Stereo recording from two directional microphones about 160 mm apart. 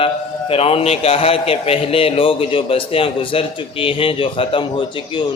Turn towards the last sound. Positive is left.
turn(degrees=30)  # may be behind; listen again after turning